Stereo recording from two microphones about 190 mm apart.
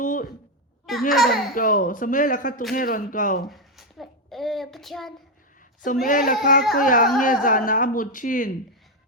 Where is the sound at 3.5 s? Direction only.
Centre (ahead or behind).